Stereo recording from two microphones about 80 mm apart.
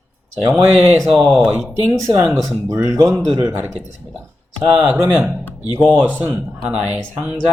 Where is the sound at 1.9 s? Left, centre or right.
Right.